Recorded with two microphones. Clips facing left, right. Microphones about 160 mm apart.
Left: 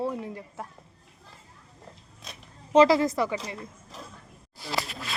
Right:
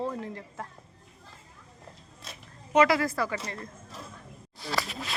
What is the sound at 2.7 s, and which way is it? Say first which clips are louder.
Speech: left 4 dB; 25° left (ahead or behind).